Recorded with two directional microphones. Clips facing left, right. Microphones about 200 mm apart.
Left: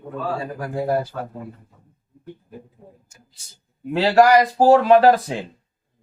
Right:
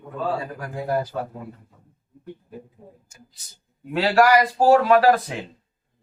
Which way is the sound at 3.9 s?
25° left (ahead or behind).